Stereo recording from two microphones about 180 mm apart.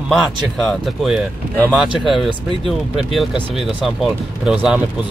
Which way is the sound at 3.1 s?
Centre (ahead or behind).